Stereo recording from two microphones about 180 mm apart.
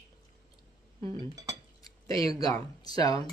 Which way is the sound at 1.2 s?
20° right (ahead or behind).